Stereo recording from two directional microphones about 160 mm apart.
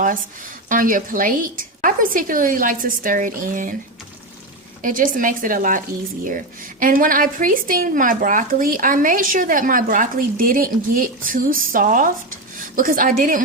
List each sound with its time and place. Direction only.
0.7 s a woman's voice: 60° right (ahead or behind)
4.8 s a woman's voice: 55° right (ahead or behind)